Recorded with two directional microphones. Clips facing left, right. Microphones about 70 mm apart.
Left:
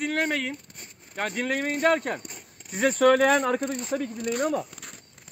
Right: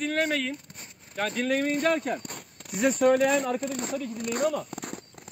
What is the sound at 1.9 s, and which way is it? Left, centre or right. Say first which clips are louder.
Speech: left 2 dB; left.